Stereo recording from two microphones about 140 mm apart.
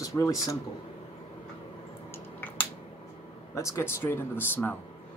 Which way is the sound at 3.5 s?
20° left (ahead or behind).